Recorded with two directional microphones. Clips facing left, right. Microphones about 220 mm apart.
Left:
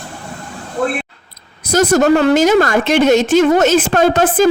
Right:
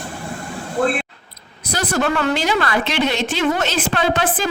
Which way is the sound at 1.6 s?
45° left (ahead or behind).